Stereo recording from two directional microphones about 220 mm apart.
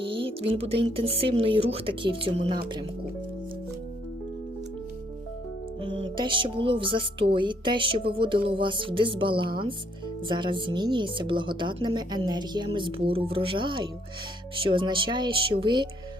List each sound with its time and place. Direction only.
0.1 s speech: 25° right (ahead or behind)
5.9 s speech: 20° right (ahead or behind)